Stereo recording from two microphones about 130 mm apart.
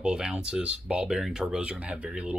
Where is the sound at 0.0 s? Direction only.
5° right (ahead or behind).